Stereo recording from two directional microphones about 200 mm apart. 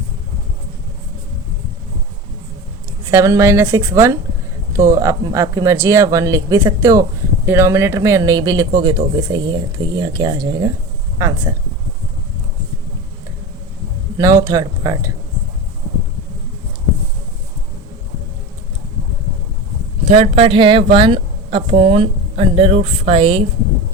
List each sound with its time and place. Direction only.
3.0 s a woman's voice: 15° right (ahead or behind)
14.2 s speech: 15° right (ahead or behind)
20.1 s a woman's voice: 35° right (ahead or behind)